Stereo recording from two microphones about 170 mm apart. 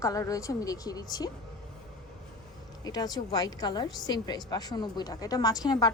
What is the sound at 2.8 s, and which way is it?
A woman's voice, 25° left (ahead or behind).